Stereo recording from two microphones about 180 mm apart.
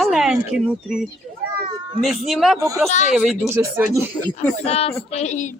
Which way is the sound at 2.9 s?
40° left (ahead or behind).